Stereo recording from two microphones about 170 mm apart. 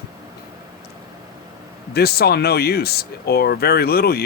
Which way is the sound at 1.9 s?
70° left (ahead or behind).